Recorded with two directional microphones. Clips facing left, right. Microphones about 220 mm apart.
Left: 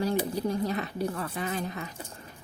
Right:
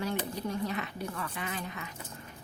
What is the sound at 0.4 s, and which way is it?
A woman's voice, 35° left (ahead or behind).